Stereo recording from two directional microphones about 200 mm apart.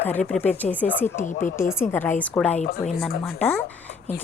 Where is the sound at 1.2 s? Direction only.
40° left (ahead or behind).